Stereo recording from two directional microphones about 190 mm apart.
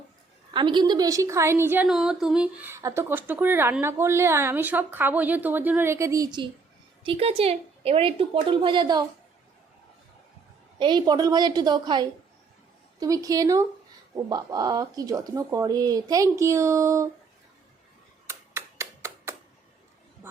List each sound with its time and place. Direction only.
0.5 s a woman's voice: 25° right (ahead or behind)
10.8 s speech: 25° right (ahead or behind)
18.3 s a sound: 15° right (ahead or behind)